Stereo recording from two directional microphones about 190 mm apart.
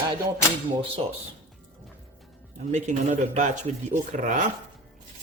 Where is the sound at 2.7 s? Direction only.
35° right (ahead or behind).